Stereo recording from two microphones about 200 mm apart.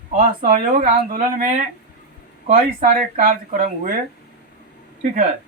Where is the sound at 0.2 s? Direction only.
40° right (ahead or behind).